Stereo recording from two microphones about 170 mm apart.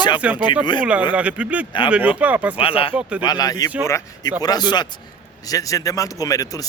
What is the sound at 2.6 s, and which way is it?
Speech, 30° left (ahead or behind).